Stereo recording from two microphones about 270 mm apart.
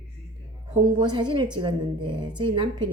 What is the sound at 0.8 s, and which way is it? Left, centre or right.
A woman's voice, centre.